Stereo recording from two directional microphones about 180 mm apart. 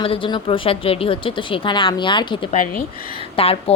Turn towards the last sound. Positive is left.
turn(degrees=30)  # may be behind; listen again after turning